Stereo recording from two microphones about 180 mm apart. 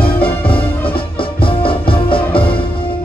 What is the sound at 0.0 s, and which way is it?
Music, 30° left (ahead or behind).